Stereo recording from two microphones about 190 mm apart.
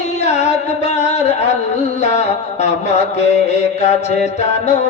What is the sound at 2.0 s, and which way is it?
Mantra, 35° left (ahead or behind).